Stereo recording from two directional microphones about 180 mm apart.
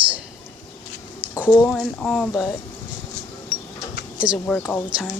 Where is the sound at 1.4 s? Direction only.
10° left (ahead or behind).